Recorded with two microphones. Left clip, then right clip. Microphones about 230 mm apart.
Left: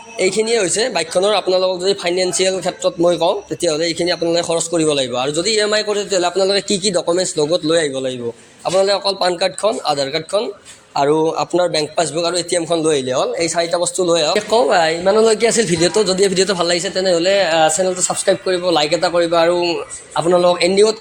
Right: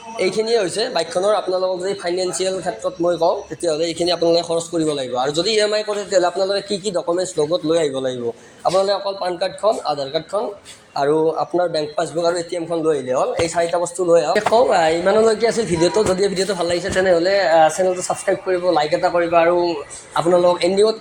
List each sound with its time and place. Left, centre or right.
0.2 s a man's voice: left
5.3 s a man's voice: left
5.7 s a man's voice: left
8.7 s a man's voice: left
14.5 s speech: left
15.3 s speech: left
20.1 s speech: left